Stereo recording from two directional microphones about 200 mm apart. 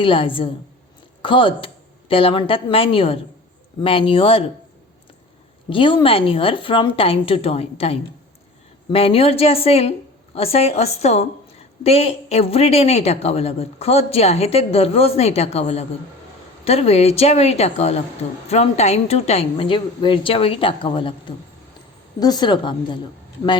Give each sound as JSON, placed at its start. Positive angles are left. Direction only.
{"t": 0.0, "sound": "speech", "side_deg": 25}
{"t": 5.6, "sound": "a woman's voice", "side_deg": 25}